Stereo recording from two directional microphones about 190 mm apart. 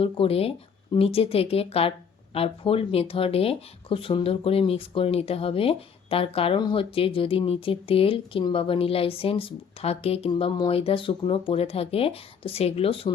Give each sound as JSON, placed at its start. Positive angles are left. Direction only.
{"t": 0.0, "sound": "speech", "side_deg": 30}